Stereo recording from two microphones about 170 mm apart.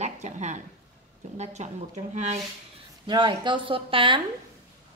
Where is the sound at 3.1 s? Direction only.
25° right (ahead or behind).